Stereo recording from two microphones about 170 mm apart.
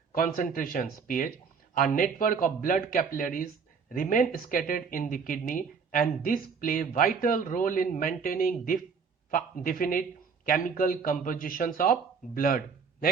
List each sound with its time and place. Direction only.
0.1 s a man's voice: 55° left (ahead or behind)